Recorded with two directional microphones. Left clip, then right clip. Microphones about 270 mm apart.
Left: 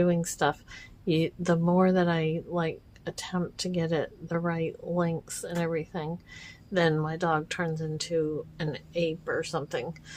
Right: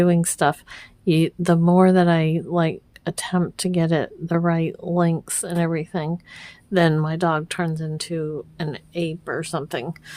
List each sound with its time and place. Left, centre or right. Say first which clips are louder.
0.0 s speech: right 7 dB; right